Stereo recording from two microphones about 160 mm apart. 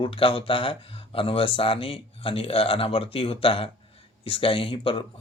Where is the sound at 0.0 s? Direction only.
35° left (ahead or behind).